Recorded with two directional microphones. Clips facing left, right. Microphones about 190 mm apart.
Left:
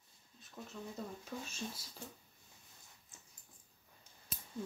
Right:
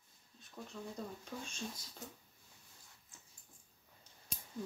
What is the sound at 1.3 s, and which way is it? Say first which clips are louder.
Speech: left 1 dB; 5° left (ahead or behind).